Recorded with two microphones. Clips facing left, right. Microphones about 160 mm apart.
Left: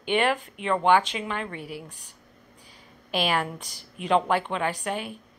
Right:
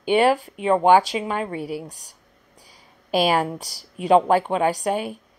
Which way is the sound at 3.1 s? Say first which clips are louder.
Right 6 dB; 40° right (ahead or behind).